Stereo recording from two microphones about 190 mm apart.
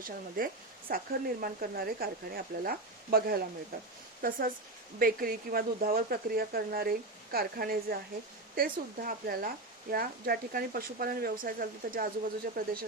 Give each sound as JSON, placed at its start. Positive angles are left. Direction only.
{"t": 0.0, "sound": "speech", "side_deg": -50}